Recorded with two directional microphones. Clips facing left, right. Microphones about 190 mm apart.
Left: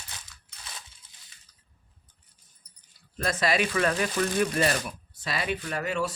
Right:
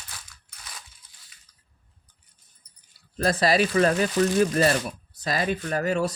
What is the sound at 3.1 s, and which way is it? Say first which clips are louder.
Speech: right 5 dB; 35° right (ahead or behind).